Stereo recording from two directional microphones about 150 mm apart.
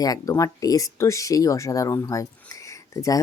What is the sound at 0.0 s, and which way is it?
Speech, 25° left (ahead or behind).